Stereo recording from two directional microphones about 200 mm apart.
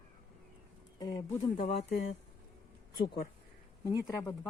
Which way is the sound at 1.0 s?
20° left (ahead or behind).